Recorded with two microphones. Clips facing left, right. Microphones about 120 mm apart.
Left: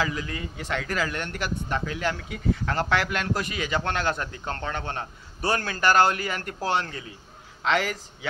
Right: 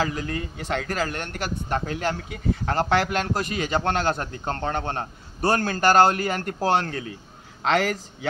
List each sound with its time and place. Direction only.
0.0 s speech: 40° right (ahead or behind)
7.6 s a man's voice: 45° right (ahead or behind)